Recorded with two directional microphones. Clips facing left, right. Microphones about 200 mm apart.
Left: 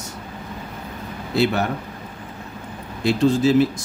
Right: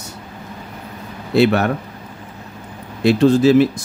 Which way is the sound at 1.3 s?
65° right (ahead or behind).